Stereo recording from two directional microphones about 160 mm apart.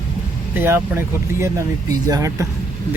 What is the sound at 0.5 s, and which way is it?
Speech, 15° right (ahead or behind).